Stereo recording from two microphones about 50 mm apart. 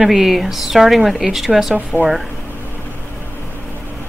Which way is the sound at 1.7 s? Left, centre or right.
Right.